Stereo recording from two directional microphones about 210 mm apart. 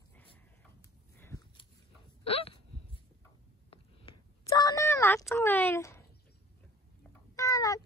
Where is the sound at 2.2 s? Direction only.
25° left (ahead or behind).